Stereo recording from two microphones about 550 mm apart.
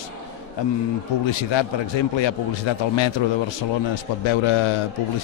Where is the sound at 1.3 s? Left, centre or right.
Left.